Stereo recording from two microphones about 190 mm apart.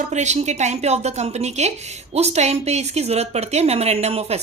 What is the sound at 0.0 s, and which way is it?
A woman's voice, 40° right (ahead or behind).